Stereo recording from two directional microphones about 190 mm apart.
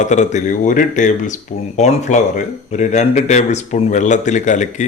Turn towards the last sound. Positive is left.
turn(degrees=40)  # may be behind; listen again after turning